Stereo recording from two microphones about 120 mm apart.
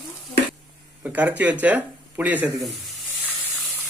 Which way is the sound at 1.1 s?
15° right (ahead or behind).